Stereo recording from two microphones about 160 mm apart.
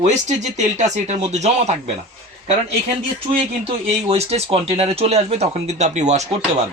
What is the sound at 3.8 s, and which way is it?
Speech, 40° right (ahead or behind).